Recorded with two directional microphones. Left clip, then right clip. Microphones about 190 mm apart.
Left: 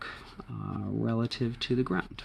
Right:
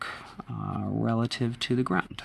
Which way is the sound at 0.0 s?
35° right (ahead or behind).